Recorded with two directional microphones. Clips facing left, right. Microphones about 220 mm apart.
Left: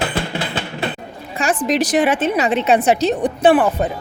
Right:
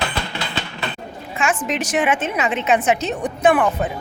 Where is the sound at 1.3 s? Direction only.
35° left (ahead or behind).